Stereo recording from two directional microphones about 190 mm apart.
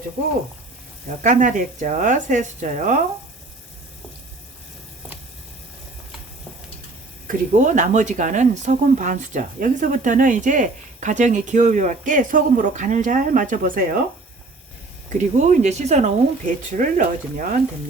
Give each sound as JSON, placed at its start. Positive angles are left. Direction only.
{"t": 1.2, "sound": "speech", "side_deg": -40}
{"t": 7.3, "sound": "speech", "side_deg": -40}
{"t": 15.4, "sound": "speech", "side_deg": -35}